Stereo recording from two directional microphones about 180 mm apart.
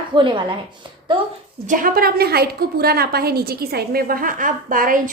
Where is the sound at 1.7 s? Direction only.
50° right (ahead or behind).